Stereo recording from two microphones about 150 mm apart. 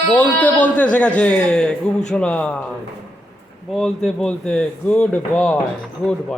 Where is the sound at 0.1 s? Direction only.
10° left (ahead or behind).